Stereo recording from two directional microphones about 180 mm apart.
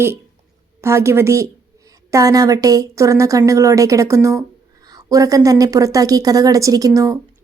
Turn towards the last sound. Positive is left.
turn(degrees=-20)  # may be behind; listen again after turning